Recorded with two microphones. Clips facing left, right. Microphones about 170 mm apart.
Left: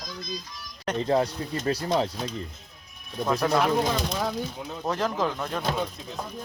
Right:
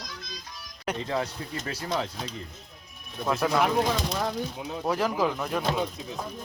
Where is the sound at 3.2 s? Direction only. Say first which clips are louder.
Left 1 dB; 5° right (ahead or behind).